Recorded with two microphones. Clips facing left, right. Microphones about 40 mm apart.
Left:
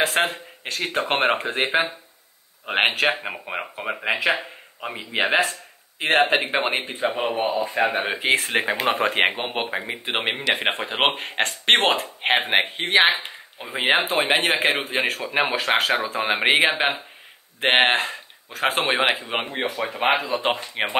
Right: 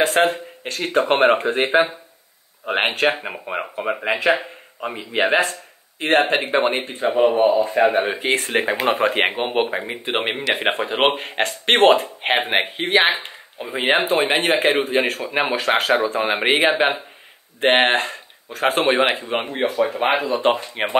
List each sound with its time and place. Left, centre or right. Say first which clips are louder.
0.0 s speech: right 4 dB; centre